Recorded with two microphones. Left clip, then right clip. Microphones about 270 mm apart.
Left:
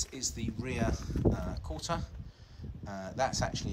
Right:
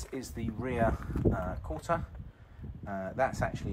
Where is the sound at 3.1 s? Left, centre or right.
Centre.